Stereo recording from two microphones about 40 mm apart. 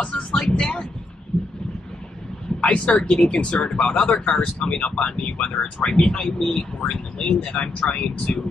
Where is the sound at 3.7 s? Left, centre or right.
Centre.